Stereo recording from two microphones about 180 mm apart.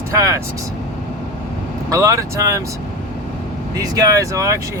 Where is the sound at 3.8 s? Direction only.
20° right (ahead or behind).